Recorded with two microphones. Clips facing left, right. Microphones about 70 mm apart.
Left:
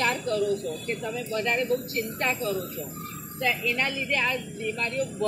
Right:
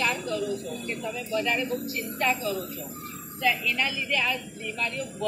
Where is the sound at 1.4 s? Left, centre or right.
Left.